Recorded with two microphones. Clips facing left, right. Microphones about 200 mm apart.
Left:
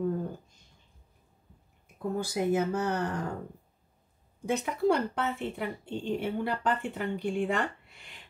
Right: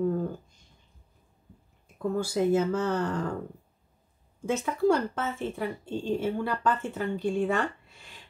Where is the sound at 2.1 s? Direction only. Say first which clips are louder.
Right 3 dB; 15° left (ahead or behind).